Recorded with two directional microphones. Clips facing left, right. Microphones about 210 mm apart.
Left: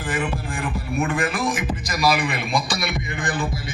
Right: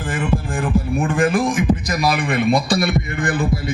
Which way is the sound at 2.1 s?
50° right (ahead or behind).